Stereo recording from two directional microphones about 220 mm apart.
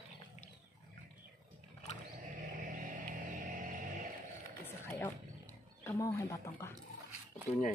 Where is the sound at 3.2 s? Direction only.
35° right (ahead or behind).